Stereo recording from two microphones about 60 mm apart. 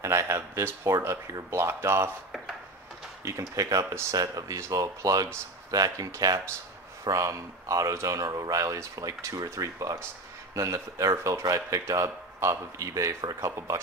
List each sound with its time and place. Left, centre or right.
0.0 s a sound: right
0.8 s speech: right
3.3 s speech: right
7.1 s speech: right
8.7 s speech: right
10.5 s speech: right